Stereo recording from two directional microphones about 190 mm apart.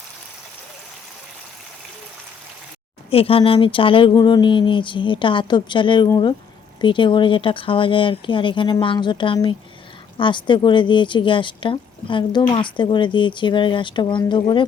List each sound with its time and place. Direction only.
3.1 s speech: 30° left (ahead or behind)